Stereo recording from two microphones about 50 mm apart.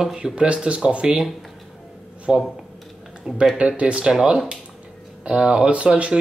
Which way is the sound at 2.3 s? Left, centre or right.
Centre.